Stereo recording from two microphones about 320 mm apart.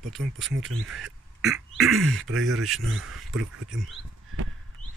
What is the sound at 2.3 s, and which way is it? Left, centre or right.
Speech, right.